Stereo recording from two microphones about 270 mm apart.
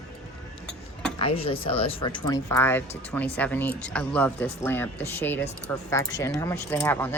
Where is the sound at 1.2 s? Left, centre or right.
Left.